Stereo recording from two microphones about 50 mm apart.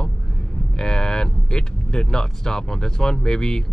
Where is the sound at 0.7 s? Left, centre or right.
Centre.